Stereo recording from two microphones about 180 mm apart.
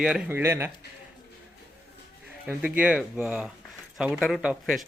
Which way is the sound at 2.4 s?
10° right (ahead or behind).